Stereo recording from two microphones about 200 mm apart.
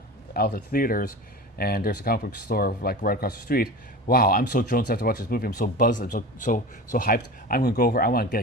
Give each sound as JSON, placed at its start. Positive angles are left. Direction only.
{"t": 0.3, "sound": "speech", "side_deg": 50}